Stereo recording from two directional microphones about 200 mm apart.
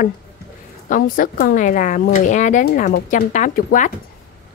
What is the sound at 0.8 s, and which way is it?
A woman's voice, 45° left (ahead or behind).